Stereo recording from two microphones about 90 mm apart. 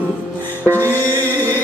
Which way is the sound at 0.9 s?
25° left (ahead or behind).